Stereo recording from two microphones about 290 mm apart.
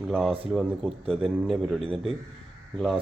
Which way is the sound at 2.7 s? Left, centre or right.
Centre.